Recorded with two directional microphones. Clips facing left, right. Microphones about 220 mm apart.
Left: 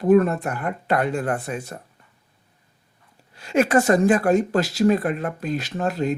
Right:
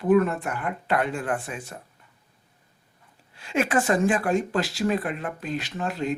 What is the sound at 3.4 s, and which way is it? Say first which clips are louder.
Speech: left 5 dB; 40° left (ahead or behind).